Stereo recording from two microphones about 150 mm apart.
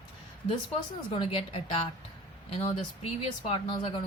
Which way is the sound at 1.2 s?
40° left (ahead or behind).